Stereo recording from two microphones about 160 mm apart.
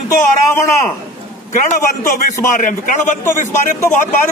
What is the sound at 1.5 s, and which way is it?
A man's voice, 50° left (ahead or behind).